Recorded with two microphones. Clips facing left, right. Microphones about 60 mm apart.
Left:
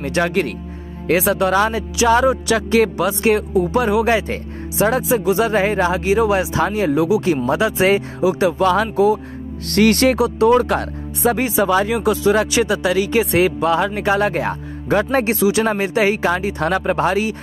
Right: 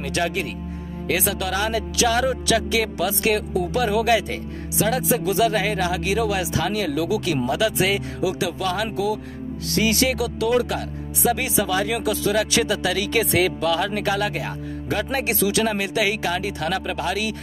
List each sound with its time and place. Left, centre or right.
0.0 s speech: left
1.0 s speech: left
9.7 s speech: left
10.1 s speech: left
11.3 s speech: left